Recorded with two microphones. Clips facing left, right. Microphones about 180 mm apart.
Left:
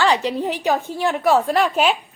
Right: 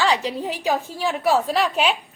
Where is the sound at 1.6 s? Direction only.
40° left (ahead or behind).